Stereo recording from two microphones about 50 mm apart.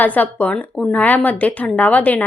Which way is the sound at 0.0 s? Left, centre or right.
Left.